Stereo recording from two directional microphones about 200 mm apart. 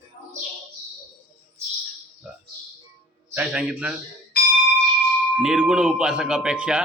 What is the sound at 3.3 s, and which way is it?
Speech, 5° right (ahead or behind).